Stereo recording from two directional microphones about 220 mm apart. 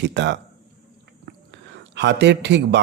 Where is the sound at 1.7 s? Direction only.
50° right (ahead or behind).